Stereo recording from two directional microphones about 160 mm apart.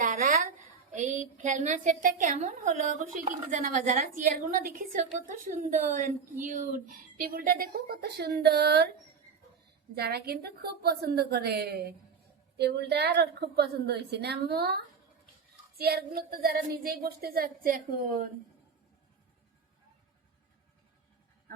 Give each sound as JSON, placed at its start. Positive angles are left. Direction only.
{"t": 0.0, "sound": "a sound", "side_deg": -55}
{"t": 0.9, "sound": "a woman's voice", "side_deg": -50}
{"t": 9.9, "sound": "a woman's voice", "side_deg": -85}
{"t": 15.8, "sound": "speech", "side_deg": -75}